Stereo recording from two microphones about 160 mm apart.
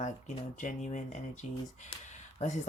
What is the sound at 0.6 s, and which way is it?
Speech, 50° left (ahead or behind).